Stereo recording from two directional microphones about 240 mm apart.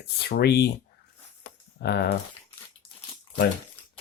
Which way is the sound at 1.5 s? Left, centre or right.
Left.